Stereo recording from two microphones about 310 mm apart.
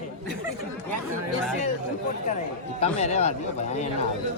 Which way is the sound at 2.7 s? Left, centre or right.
Left.